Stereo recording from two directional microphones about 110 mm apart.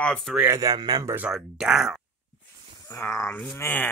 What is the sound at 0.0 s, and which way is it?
Speech, 10° left (ahead or behind).